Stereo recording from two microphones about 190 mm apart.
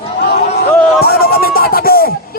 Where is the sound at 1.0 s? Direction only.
55° left (ahead or behind).